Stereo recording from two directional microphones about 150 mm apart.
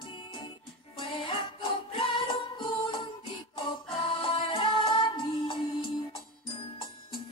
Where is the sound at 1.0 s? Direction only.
35° left (ahead or behind).